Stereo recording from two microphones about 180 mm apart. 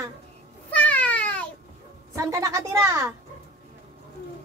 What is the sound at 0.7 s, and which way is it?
Cat, 10° left (ahead or behind).